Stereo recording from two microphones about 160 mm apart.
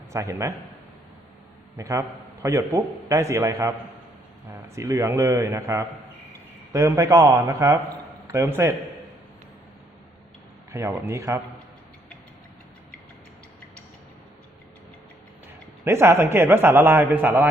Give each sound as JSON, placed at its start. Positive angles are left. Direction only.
{"t": 0.1, "sound": "a man's voice", "side_deg": -20}
{"t": 1.7, "sound": "a man's voice", "side_deg": -20}
{"t": 10.7, "sound": "a man's voice", "side_deg": -20}
{"t": 15.8, "sound": "a man's voice", "side_deg": -15}